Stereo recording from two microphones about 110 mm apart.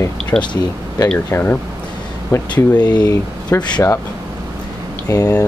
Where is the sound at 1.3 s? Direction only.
20° left (ahead or behind).